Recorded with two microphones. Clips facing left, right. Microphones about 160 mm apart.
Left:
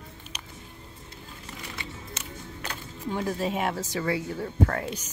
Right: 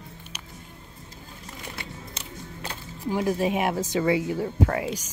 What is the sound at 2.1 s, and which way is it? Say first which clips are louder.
Music: even; 30° right (ahead or behind).